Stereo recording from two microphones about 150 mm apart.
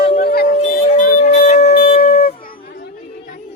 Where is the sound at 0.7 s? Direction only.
70° left (ahead or behind).